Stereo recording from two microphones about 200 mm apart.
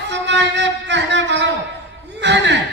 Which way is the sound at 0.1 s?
60° right (ahead or behind).